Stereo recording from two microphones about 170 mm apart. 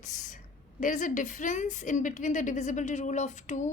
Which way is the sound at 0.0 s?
45° left (ahead or behind).